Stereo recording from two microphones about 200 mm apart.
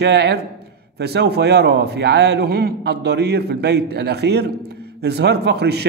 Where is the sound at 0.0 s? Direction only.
55° right (ahead or behind).